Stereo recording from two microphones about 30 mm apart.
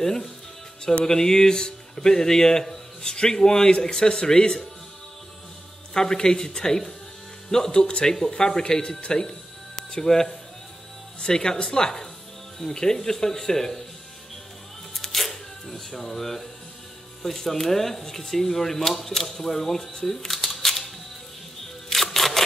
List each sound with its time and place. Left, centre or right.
0.0 s speech: centre
5.9 s speech: left
15.0 s camera: centre
17.2 s speech: centre
20.1 s camera: centre
21.9 s a sound: centre